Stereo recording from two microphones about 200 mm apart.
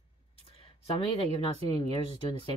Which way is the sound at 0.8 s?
25° left (ahead or behind).